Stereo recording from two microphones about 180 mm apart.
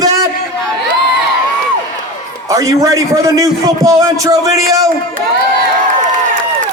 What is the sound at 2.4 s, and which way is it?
A man's voice, 15° right (ahead or behind).